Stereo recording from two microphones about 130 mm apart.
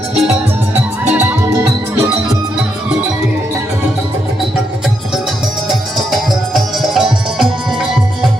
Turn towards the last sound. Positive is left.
turn(degrees=0)  # may be behind; listen again after turning